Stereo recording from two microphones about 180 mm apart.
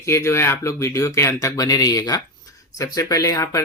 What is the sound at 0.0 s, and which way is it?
Speech, 15° left (ahead or behind).